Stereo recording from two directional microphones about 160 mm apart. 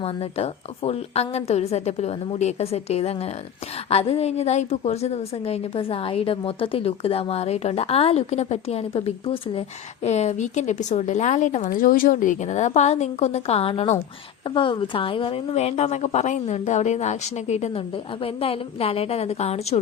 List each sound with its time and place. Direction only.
0.0 s a woman's voice: 40° left (ahead or behind)
11.7 s a woman's voice: 60° left (ahead or behind); by 19.8 s 40° left (ahead or behind)